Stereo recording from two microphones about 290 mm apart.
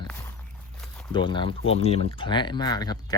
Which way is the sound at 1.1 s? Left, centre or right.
Centre.